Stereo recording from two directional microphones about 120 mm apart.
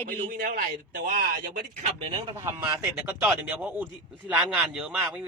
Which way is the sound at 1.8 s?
50° right (ahead or behind).